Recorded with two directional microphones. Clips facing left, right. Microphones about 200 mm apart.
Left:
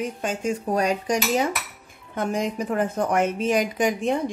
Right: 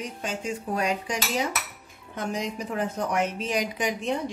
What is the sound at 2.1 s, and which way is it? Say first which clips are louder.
A woman's voice: left 5 dB; 55° left (ahead or behind).